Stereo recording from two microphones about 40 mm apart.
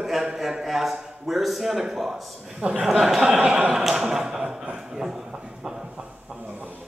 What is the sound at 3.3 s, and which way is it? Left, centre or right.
Speech, right.